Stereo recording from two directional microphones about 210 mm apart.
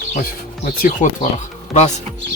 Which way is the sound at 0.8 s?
35° left (ahead or behind).